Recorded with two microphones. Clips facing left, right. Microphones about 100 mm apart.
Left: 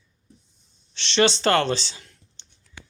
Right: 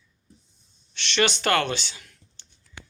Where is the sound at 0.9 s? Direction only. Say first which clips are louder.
Left 4 dB; 30° left (ahead or behind).